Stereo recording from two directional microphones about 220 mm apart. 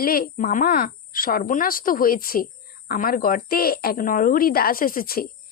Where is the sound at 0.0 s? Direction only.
40° left (ahead or behind).